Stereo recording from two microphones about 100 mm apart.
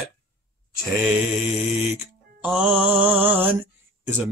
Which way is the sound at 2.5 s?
5° right (ahead or behind).